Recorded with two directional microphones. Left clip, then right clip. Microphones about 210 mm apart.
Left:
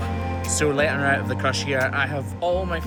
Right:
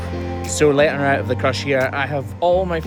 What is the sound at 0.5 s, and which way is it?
Speech, 45° right (ahead or behind).